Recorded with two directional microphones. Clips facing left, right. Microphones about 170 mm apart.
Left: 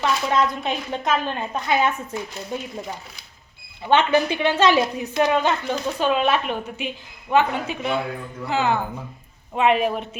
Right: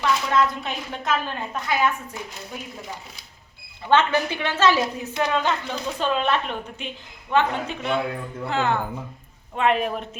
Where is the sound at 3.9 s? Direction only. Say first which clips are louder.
Left 2 dB; 15° left (ahead or behind).